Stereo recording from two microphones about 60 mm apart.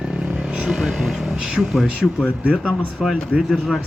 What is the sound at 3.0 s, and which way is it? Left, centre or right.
Speech, centre.